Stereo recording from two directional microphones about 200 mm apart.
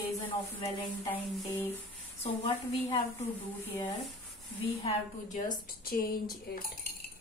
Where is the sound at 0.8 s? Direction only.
Centre (ahead or behind).